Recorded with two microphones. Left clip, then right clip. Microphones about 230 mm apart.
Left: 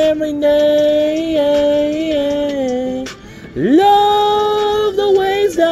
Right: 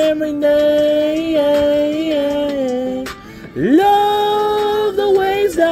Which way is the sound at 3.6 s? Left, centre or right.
Centre.